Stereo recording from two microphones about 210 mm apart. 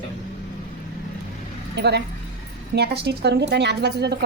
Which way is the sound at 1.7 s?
55° right (ahead or behind).